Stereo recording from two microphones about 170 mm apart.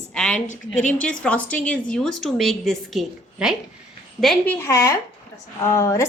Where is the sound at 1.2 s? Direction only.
5° left (ahead or behind).